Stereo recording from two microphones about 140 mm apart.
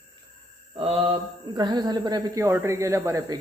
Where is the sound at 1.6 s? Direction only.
30° right (ahead or behind).